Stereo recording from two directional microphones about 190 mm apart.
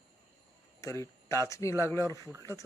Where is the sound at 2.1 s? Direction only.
20° right (ahead or behind).